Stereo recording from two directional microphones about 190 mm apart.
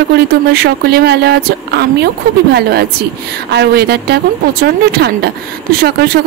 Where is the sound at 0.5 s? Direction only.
55° right (ahead or behind).